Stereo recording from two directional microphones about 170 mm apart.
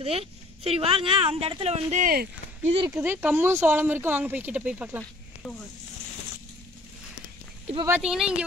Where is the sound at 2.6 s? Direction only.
30° right (ahead or behind).